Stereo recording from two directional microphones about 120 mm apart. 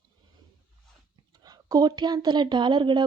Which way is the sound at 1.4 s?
30° right (ahead or behind).